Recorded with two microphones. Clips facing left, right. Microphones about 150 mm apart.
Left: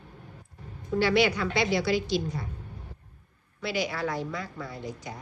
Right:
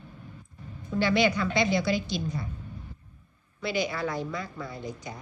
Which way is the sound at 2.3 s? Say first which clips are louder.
Right 1 dB; 60° left (ahead or behind).